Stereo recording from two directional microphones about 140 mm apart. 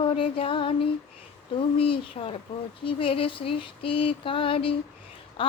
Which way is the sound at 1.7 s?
40° left (ahead or behind).